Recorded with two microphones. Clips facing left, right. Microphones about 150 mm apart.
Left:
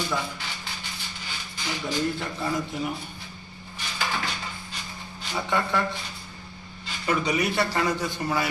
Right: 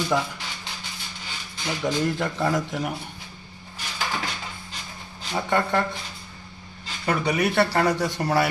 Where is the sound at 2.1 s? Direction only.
85° right.